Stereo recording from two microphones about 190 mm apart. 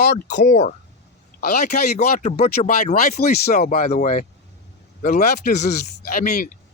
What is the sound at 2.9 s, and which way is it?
Speech, 55° left (ahead or behind).